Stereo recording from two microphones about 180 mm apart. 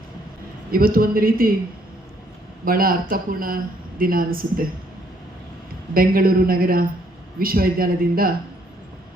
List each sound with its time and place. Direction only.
0.7 s a man's voice: 55° right (ahead or behind)
2.6 s speech: 55° right (ahead or behind)
5.9 s speech: 55° right (ahead or behind)